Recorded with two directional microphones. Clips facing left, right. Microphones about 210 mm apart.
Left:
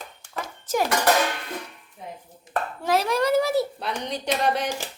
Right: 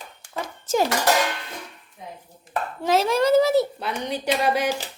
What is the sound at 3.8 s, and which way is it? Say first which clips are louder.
Speech: right 2 dB; 5° right (ahead or behind).